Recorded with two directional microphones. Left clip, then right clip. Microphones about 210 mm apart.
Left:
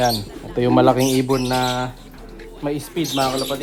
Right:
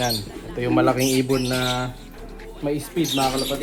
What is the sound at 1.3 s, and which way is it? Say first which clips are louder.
Bird: left 3 dB; 35° left (ahead or behind).